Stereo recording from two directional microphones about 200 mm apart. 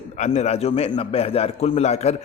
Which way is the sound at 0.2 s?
35° left (ahead or behind).